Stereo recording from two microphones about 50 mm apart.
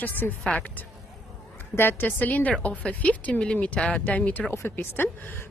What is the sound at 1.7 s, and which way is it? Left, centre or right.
Speech, left.